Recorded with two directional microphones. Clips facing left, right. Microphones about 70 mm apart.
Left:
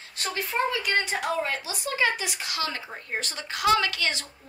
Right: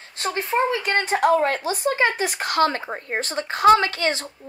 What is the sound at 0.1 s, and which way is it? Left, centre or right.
Speech, right.